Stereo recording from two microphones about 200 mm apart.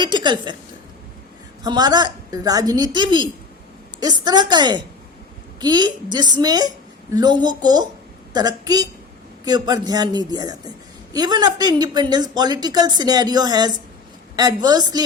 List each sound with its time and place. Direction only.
0.0 s speech: 20° right (ahead or behind)
1.6 s speech: 20° right (ahead or behind)